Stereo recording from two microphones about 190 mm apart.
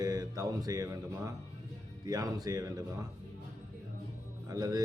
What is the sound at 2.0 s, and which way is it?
Mantra, 20° right (ahead or behind).